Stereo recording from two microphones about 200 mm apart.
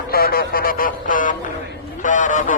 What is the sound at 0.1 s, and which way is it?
A man's voice, 50° left (ahead or behind).